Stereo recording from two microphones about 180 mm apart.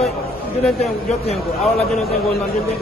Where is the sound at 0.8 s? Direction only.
35° left (ahead or behind).